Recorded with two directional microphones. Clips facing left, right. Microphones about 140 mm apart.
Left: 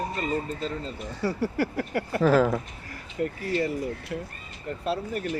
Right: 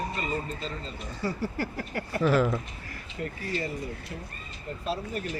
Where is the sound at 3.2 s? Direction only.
40° left (ahead or behind).